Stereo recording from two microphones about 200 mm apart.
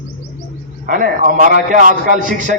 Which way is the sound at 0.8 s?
45° right (ahead or behind).